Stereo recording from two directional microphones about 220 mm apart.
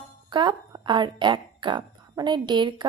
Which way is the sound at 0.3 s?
20° right (ahead or behind).